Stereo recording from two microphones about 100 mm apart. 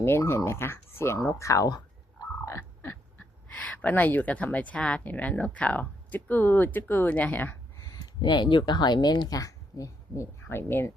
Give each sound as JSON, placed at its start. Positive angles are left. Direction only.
{"t": 0.0, "sound": "speech", "side_deg": 25}
{"t": 2.5, "sound": "speech", "side_deg": 25}
{"t": 7.8, "sound": "speech", "side_deg": 35}